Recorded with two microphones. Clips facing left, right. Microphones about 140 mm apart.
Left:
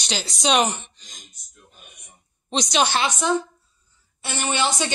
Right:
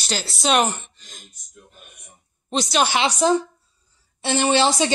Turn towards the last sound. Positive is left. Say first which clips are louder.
# right 6 dB
turn(degrees=-30)  # may be behind; listen again after turning